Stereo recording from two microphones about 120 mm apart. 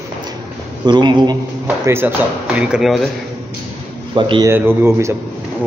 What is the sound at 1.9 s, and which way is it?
Speech, 15° right (ahead or behind).